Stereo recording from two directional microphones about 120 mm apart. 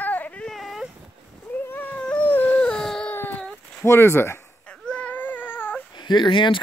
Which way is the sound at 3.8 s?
20° left (ahead or behind).